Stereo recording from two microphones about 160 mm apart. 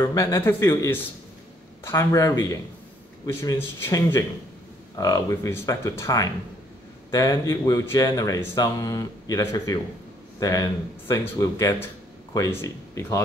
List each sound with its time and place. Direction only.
0.0 s speech: 20° left (ahead or behind)